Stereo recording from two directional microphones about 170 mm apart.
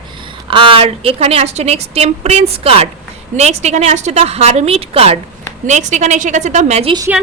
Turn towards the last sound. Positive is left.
turn(degrees=-35)  # may be behind; listen again after turning